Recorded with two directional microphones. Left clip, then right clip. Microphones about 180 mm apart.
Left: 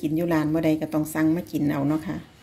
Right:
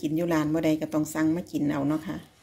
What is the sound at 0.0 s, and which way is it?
A woman's voice, 5° right (ahead or behind).